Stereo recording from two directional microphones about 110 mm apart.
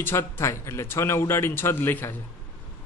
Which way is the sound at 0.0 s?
20° left (ahead or behind).